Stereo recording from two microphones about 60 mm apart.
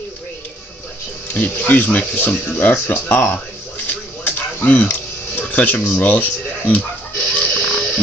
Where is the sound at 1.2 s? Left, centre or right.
Left.